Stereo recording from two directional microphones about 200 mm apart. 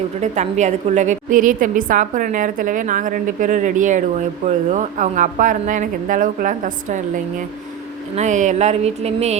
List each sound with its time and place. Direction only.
0.2 s a woman's voice: 35° right (ahead or behind)
8.1 s a woman's voice: 35° right (ahead or behind)